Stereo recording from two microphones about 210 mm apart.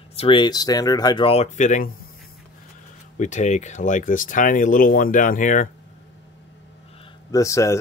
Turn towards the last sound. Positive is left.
turn(degrees=15)  # may be behind; listen again after turning